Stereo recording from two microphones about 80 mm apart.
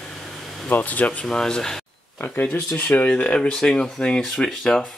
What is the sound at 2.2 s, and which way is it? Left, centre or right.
Speech, left.